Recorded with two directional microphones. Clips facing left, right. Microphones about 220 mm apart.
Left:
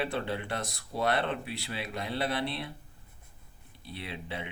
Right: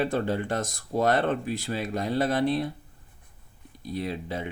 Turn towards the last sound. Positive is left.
turn(degrees=-40)  # may be behind; listen again after turning